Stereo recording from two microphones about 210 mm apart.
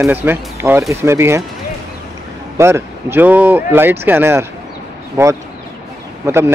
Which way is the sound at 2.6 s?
10° right (ahead or behind).